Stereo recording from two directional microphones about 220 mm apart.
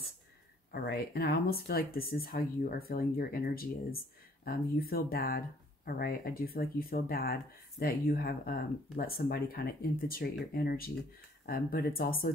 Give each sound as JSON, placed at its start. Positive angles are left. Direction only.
{"t": 0.7, "sound": "speech", "side_deg": 45}